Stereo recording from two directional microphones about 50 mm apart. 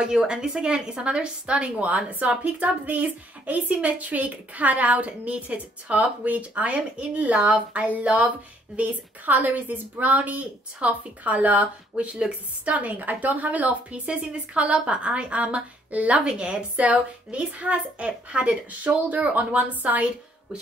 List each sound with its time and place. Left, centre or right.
0.0 s a woman's voice: centre; by 20.1 s right